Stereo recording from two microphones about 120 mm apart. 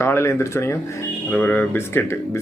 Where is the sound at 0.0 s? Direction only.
20° left (ahead or behind).